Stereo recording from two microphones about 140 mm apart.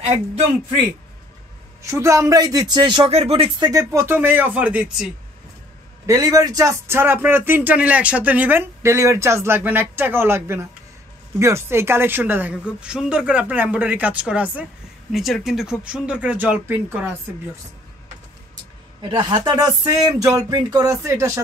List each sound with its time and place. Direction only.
0.0 s speech: 50° right (ahead or behind)
1.9 s speech: 20° right (ahead or behind); by 5.1 s 5° right (ahead or behind)
6.0 s speech: 25° right (ahead or behind)
19.0 s speech: 35° right (ahead or behind)